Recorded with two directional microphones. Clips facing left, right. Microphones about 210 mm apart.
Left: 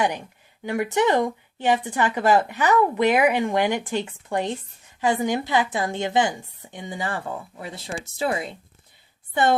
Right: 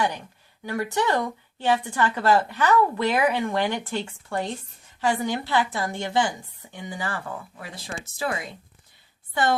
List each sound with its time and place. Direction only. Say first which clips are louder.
0.6 s a woman's voice: left 4 dB; 20° left (ahead or behind)